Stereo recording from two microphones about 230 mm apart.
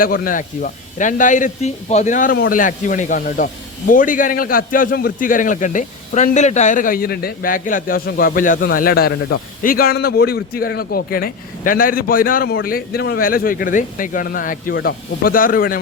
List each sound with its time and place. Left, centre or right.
0.0 s speech: left